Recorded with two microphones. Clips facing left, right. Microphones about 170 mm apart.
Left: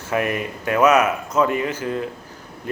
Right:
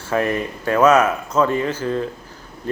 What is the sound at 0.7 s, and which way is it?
Speech, 15° left (ahead or behind).